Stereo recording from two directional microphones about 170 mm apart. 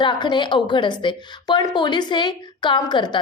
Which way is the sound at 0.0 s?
25° left (ahead or behind).